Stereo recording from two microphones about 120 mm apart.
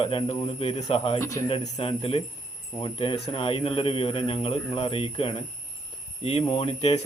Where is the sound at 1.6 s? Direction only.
45° left (ahead or behind).